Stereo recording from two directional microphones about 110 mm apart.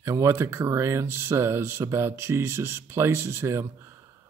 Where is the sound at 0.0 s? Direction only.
25° right (ahead or behind).